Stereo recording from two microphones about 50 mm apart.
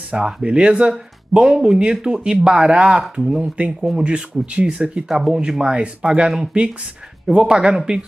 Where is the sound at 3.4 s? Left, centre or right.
Right.